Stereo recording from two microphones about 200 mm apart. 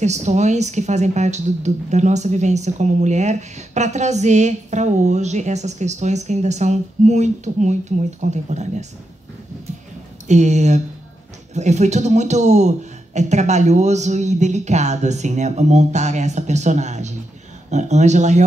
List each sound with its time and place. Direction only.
0.0 s speech: 35° right (ahead or behind)
10.2 s speech: 35° right (ahead or behind)